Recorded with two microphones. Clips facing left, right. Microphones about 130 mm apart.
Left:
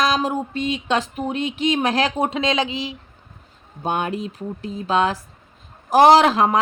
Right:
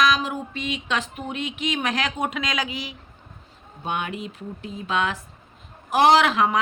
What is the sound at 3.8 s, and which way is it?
Speech, 40° left (ahead or behind).